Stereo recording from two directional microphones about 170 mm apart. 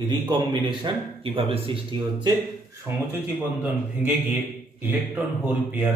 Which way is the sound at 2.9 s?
20° right (ahead or behind).